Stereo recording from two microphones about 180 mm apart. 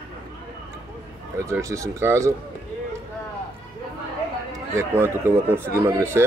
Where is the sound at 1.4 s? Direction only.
15° right (ahead or behind).